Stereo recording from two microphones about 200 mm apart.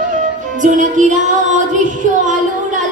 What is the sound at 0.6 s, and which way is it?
Music, 40° right (ahead or behind).